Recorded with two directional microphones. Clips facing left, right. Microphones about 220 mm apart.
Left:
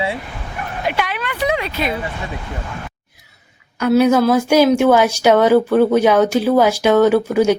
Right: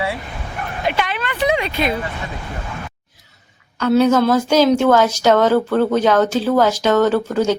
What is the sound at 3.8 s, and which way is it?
A woman's voice, 10° left (ahead or behind).